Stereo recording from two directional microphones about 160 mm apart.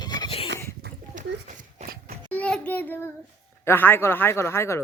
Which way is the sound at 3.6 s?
15° left (ahead or behind).